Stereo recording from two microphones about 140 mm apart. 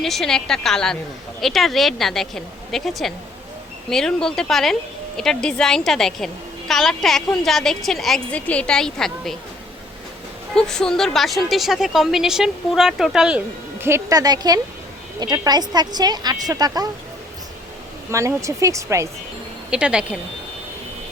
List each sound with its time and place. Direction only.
0.0 s a woman's voice: centre (ahead or behind)
10.5 s a woman's voice: 5° left (ahead or behind)
13.8 s a woman's voice: 20° right (ahead or behind)
18.1 s a woman's voice: 20° right (ahead or behind)
19.7 s speech: 5° right (ahead or behind)